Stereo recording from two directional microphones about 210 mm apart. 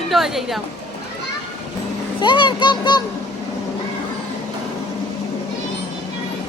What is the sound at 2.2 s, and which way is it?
Speech, 20° left (ahead or behind).